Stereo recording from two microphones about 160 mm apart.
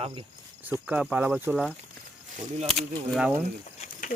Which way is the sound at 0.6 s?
10° right (ahead or behind).